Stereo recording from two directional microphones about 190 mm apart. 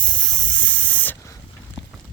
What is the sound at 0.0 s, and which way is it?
Hiss, 5° left (ahead or behind).